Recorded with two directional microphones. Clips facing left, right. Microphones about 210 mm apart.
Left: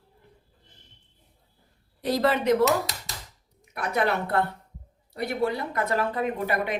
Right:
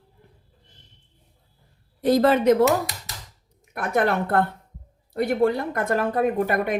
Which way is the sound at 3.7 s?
50° right (ahead or behind).